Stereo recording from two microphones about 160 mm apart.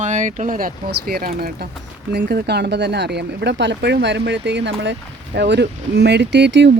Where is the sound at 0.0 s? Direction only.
50° right (ahead or behind); by 1.6 s 70° right (ahead or behind).